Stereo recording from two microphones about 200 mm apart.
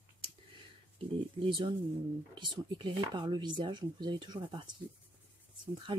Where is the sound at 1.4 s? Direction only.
25° right (ahead or behind).